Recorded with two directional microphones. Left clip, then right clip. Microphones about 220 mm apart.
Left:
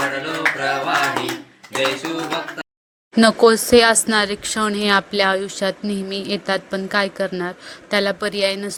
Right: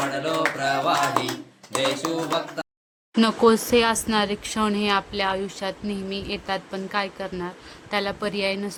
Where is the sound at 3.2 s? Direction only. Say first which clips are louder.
Left 6 dB; 15° left (ahead or behind).